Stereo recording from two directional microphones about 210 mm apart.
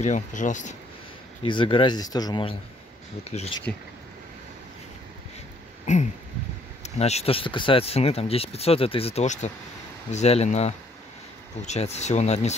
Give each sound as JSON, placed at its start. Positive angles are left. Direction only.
{"t": 0.0, "sound": "speech", "side_deg": 35}
{"t": 1.4, "sound": "speech", "side_deg": 25}
{"t": 6.8, "sound": "speech", "side_deg": 30}